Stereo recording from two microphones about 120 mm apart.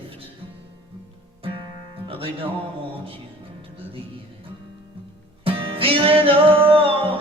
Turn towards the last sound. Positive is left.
turn(degrees=-50)  # may be behind; listen again after turning